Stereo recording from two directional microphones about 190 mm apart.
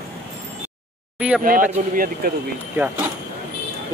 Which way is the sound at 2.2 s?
50° right (ahead or behind).